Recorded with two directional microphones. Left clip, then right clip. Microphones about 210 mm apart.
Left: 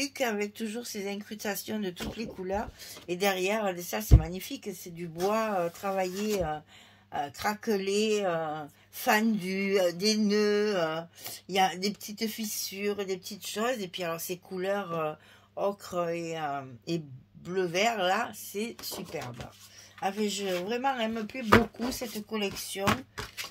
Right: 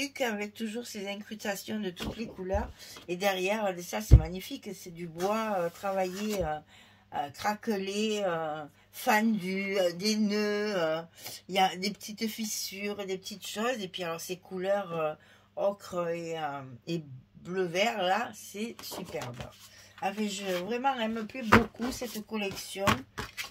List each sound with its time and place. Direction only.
0.0 s speech: 40° left (ahead or behind)
21.4 s speech: centre (ahead or behind)
21.9 s speech: 35° left (ahead or behind)